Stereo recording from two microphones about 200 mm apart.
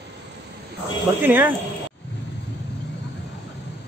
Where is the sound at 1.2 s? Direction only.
10° right (ahead or behind).